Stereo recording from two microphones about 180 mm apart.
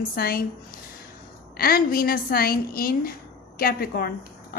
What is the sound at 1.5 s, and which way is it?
A woman's voice, 55° left (ahead or behind).